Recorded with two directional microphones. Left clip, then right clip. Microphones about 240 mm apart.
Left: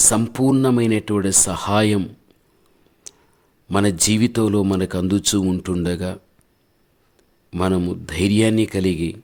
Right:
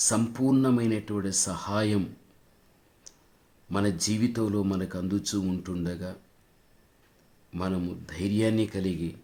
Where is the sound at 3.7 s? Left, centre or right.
Left.